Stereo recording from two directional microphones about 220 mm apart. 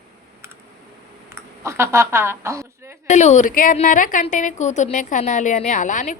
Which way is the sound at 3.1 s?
30° left (ahead or behind).